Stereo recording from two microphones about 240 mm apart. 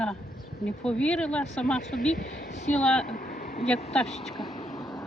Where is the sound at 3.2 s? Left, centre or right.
Left.